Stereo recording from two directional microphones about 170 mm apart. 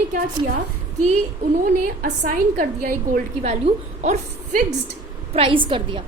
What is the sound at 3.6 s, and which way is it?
A woman's voice, 40° right (ahead or behind).